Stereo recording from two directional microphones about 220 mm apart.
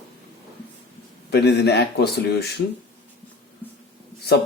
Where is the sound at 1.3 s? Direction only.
50° left (ahead or behind).